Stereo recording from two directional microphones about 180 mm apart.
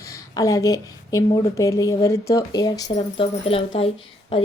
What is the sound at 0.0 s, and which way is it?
A woman's voice, 15° left (ahead or behind).